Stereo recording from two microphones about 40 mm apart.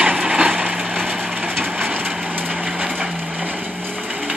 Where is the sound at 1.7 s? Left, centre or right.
Right.